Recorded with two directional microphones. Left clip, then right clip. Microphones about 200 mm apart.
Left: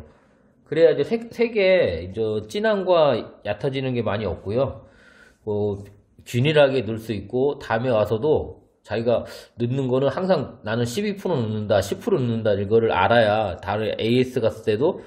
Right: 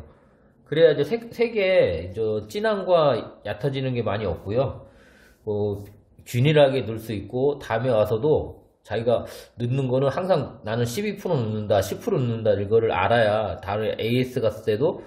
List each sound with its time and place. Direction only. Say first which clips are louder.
0.7 s a man's voice: left 1 dB; 45° left (ahead or behind)